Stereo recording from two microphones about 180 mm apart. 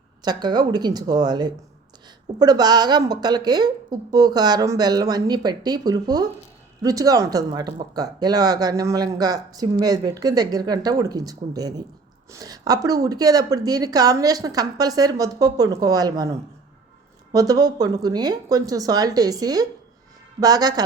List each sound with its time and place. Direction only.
0.2 s speech: 20° right (ahead or behind)